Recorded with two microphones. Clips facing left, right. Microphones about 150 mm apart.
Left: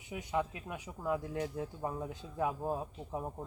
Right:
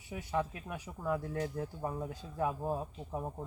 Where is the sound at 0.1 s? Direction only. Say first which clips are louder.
Even; 15° left (ahead or behind).